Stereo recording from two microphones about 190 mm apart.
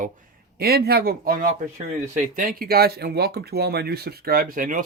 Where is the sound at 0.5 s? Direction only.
55° right (ahead or behind).